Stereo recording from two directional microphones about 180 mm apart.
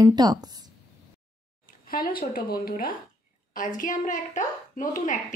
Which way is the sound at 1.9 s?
55° left (ahead or behind).